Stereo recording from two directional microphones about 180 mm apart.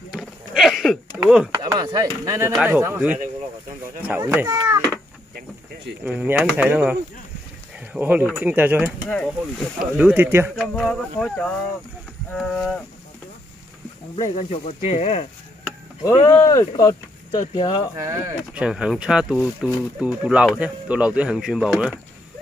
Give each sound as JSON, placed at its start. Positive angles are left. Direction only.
{"t": 0.1, "sound": "sheep", "side_deg": 0}
{"t": 1.2, "sound": "speech", "side_deg": -5}
{"t": 1.5, "sound": "speech", "side_deg": -20}
{"t": 6.0, "sound": "speech", "side_deg": -10}
{"t": 9.1, "sound": "speech", "side_deg": 5}
{"t": 9.9, "sound": "speech", "side_deg": -10}
{"t": 10.5, "sound": "speech", "side_deg": 0}
{"t": 14.3, "sound": "speech", "side_deg": 35}
{"t": 16.3, "sound": "speech", "side_deg": 15}
{"t": 17.9, "sound": "speech", "side_deg": -15}
{"t": 18.6, "sound": "speech", "side_deg": -5}